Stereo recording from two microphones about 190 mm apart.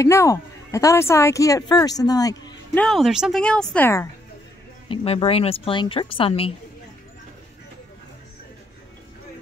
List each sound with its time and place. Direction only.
0.0 s speech: 15° left (ahead or behind)
2.8 s speech: centre (ahead or behind)
4.8 s speech: 30° left (ahead or behind)